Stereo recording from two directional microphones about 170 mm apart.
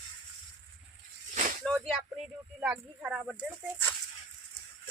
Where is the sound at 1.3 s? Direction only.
50° right (ahead or behind).